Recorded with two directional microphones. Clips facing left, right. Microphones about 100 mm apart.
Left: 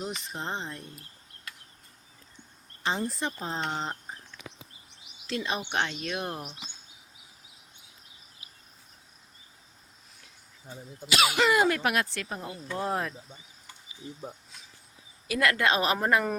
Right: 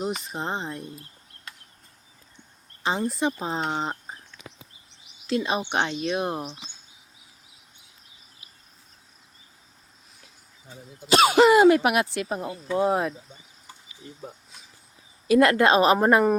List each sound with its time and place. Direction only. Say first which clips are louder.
0.6 s speech: right 5 dB; 15° right (ahead or behind)
2.8 s speech: right 5 dB; 15° right (ahead or behind)
5.3 s speech: right 6 dB; 20° right (ahead or behind)
11.1 s speech: right 8 dB; 35° right (ahead or behind); by 13.1 s 15° right (ahead or behind)
15.3 s speech: right 8 dB; 30° right (ahead or behind)